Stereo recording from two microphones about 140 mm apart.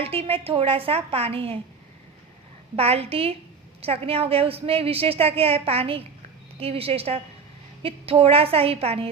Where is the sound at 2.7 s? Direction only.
45° right (ahead or behind).